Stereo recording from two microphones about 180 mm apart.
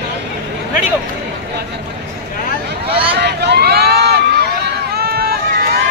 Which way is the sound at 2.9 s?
65° right (ahead or behind).